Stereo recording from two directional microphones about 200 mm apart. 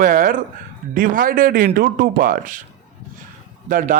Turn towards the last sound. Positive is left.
turn(degrees=-40)  # may be behind; listen again after turning